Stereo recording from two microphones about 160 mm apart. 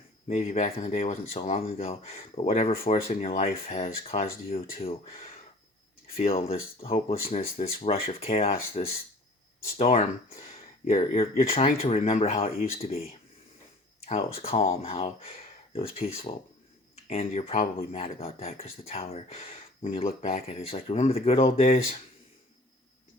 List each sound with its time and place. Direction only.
0.3 s speech: 45° left (ahead or behind)
6.3 s speech: 40° left (ahead or behind)